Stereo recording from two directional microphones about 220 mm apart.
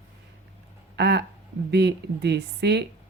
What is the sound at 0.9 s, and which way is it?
Speech, 50° right (ahead or behind).